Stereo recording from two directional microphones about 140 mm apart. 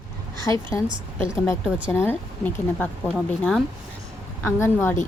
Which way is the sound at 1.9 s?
15° left (ahead or behind).